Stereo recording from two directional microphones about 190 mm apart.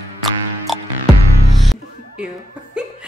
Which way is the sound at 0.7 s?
Centre (ahead or behind).